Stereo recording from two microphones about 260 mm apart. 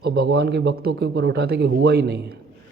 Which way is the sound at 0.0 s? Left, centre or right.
Right.